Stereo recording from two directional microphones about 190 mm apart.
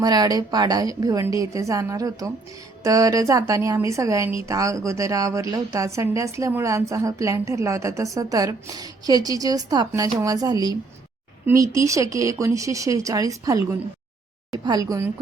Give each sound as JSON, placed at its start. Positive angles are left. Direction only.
{"t": 0.0, "sound": "a woman's voice", "side_deg": -20}